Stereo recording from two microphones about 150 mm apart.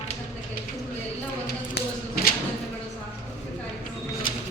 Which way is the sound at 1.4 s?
90° left.